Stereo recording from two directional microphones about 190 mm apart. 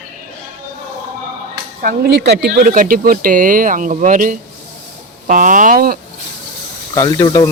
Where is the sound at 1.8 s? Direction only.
55° right (ahead or behind).